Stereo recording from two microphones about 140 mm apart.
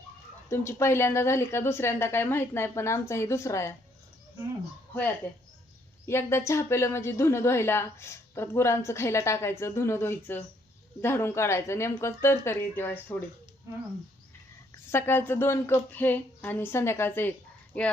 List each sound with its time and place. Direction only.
0.5 s a woman's voice: 15° left (ahead or behind)
6.1 s a woman's voice: 20° left (ahead or behind)
14.8 s speech: 15° left (ahead or behind)